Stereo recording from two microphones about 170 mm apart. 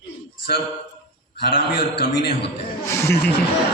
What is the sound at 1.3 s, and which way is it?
Speech, 70° left (ahead or behind).